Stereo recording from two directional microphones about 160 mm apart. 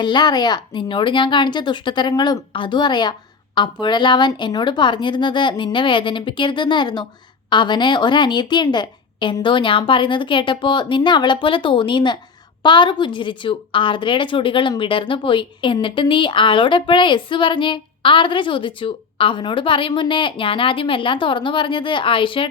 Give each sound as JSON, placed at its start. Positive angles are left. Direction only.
{"t": 0.0, "sound": "a woman's voice", "side_deg": 30}